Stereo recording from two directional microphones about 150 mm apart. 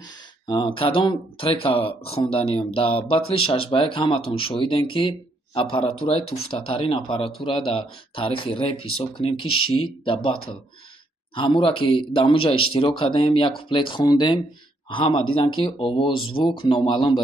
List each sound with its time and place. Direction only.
0.5 s speech: 30° left (ahead or behind)